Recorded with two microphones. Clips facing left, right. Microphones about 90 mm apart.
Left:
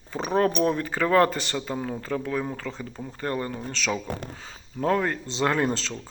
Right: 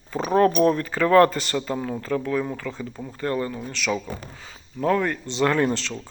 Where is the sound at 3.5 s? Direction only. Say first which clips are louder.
Right 2 dB; 40° left (ahead or behind).